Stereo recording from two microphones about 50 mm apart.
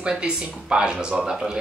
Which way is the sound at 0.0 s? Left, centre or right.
Centre.